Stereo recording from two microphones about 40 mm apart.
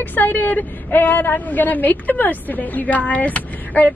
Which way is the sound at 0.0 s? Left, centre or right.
Left.